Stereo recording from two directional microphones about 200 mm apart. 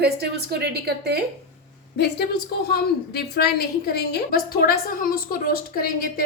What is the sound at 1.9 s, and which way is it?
A woman's voice, 55° left (ahead or behind).